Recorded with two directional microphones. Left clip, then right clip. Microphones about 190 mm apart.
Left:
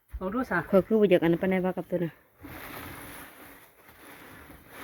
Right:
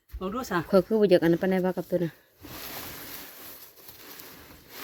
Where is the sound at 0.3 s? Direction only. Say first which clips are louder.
Left 1 dB; 45° right (ahead or behind).